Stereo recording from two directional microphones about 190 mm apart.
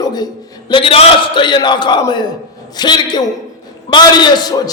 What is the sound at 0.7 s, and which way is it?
A man's voice, 30° left (ahead or behind).